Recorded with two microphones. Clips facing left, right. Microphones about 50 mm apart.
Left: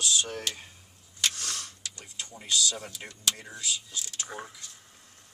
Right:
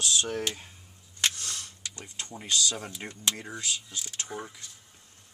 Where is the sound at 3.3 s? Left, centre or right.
Right.